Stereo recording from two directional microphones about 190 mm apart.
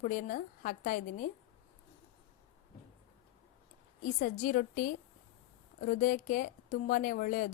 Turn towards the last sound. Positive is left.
turn(degrees=45)  # may be behind; listen again after turning